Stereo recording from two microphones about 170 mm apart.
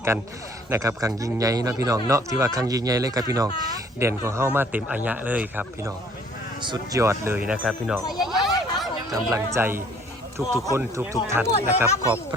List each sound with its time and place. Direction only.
0.7 s speech: 20° right (ahead or behind)
6.6 s speech: 25° right (ahead or behind); by 7.9 s centre (ahead or behind)
8.1 s a sound: centre (ahead or behind)
9.0 s speech: 20° right (ahead or behind)